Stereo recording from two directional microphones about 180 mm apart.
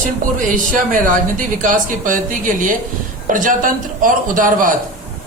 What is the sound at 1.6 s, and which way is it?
Speech, 45° right (ahead or behind).